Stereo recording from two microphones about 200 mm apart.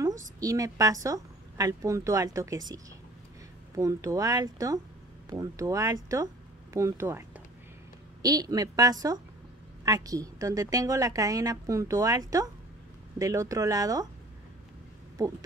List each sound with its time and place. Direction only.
0.0 s a woman's voice: 15° right (ahead or behind)